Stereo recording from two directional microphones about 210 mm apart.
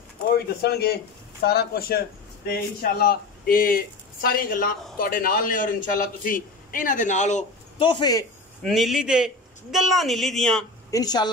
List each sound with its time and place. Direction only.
0.6 s a man's voice: 50° left (ahead or behind); by 8.3 s 20° left (ahead or behind)
8.6 s a man's voice: centre (ahead or behind)
10.9 s speech: 20° left (ahead or behind)